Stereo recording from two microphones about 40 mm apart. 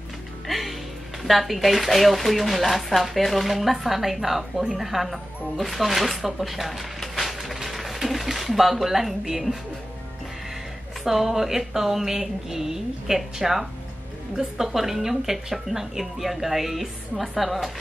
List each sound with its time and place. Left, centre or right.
0.5 s a woman's voice: centre
11.1 s speech: centre